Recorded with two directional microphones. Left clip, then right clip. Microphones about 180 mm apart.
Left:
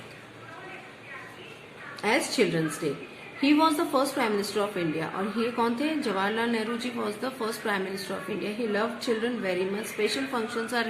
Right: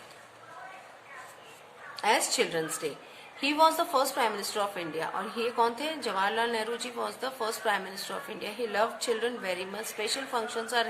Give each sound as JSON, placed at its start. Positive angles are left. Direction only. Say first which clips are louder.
{"t": 2.0, "sound": "a woman's voice", "louder": "left 1 dB", "side_deg": -40}